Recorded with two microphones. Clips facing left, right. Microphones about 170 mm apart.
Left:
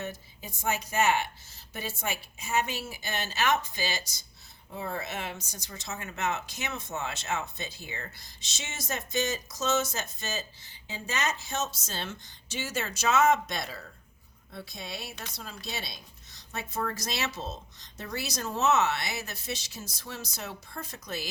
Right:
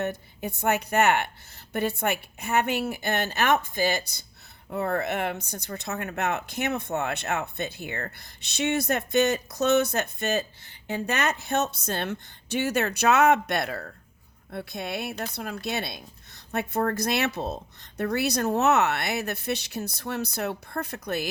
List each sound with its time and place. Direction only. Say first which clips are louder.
0.0 s a woman's voice: right 9 dB; 60° right (ahead or behind)